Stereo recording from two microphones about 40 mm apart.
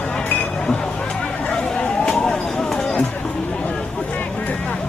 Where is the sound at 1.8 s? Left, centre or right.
Centre.